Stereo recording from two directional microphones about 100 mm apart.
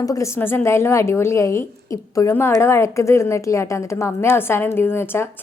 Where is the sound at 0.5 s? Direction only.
25° left (ahead or behind).